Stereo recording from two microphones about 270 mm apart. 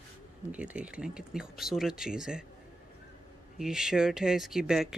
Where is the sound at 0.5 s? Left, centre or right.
Centre.